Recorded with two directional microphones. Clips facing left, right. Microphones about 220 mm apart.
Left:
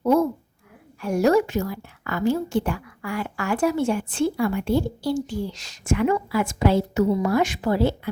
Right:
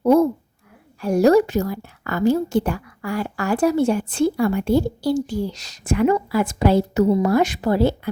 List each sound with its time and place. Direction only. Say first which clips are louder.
1.0 s a woman's voice: right 4 dB; 35° right (ahead or behind)